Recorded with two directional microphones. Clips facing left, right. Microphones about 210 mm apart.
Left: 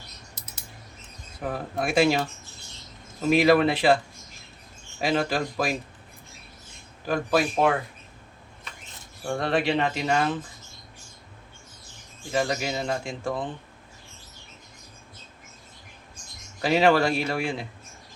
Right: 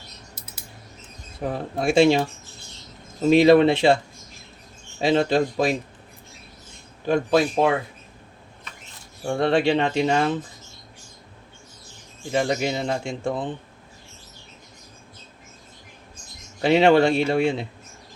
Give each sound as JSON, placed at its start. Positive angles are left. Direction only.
{"t": 1.4, "sound": "speech", "side_deg": -25}
{"t": 4.9, "sound": "speech", "side_deg": -25}
{"t": 7.0, "sound": "speech", "side_deg": -25}
{"t": 9.3, "sound": "speech", "side_deg": -30}
{"t": 12.3, "sound": "speech", "side_deg": -25}
{"t": 16.6, "sound": "speech", "side_deg": -25}